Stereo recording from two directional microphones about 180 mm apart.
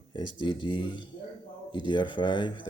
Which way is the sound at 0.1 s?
25° left (ahead or behind).